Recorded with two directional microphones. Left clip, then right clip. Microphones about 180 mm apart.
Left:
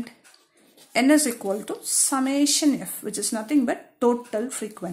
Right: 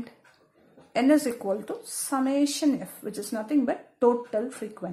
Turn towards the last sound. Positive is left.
turn(degrees=25)  # may be behind; listen again after turning